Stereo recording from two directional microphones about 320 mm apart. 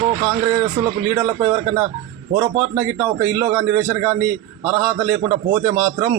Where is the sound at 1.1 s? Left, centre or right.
Centre.